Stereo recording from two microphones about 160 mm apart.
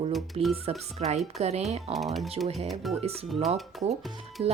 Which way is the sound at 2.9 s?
40° right (ahead or behind).